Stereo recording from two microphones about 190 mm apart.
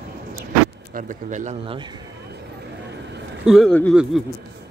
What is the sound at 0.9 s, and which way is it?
Speech, 40° right (ahead or behind).